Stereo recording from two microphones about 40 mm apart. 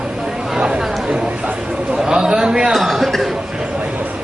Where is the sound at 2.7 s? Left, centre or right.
Centre.